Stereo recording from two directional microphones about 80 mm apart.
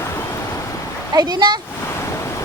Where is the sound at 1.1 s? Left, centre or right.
Right.